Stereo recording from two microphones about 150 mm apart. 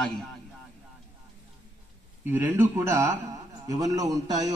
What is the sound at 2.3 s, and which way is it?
A man's voice, 15° right (ahead or behind).